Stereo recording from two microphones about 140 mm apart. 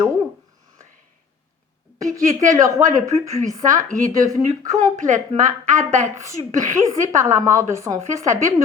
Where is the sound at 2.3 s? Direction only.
60° right (ahead or behind).